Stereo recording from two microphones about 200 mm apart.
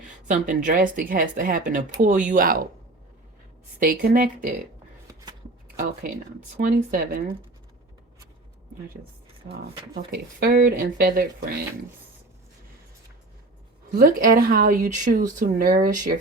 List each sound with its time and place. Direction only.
0.0 s speech: 40° right (ahead or behind)
3.8 s speech: 45° right (ahead or behind)
5.6 s speech: 45° right (ahead or behind)
9.5 s speech: 50° right (ahead or behind)
13.9 s speech: 45° right (ahead or behind)